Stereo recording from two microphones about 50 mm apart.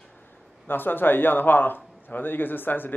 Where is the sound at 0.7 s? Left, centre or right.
Left.